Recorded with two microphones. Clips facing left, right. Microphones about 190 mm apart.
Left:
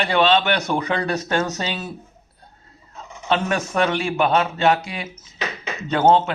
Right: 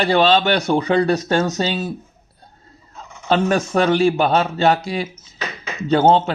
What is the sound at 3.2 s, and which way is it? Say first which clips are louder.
Speech: right 4 dB; 35° right (ahead or behind).